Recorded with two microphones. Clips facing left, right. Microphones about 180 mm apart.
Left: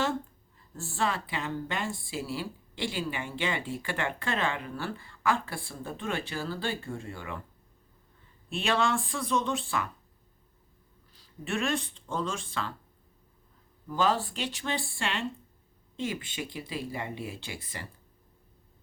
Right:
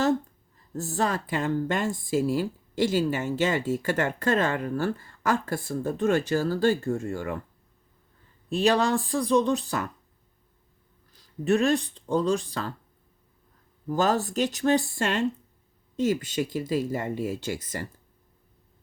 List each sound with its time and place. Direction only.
0.7 s speech: 40° right (ahead or behind)
8.4 s speech: 40° right (ahead or behind)
11.1 s speech: 40° right (ahead or behind)
13.8 s speech: 45° right (ahead or behind)